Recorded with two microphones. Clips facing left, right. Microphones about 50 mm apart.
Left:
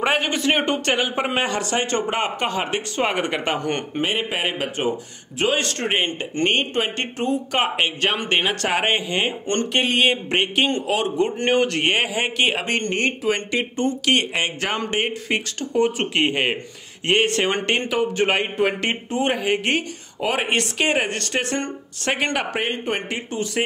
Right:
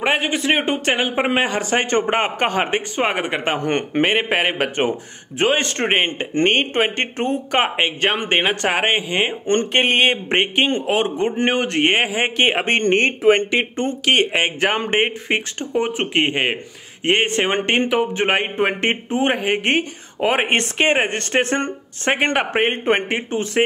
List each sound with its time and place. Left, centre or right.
0.0 s speech: centre
1.0 s speech: right
1.7 s speech: right
3.1 s speech: centre
3.5 s speech: right
3.9 s speech: right